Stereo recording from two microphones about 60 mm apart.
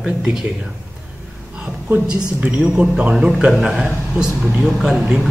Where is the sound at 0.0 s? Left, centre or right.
Centre.